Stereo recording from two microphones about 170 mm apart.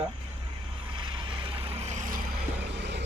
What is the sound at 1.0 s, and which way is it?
Vehicle, 30° right (ahead or behind).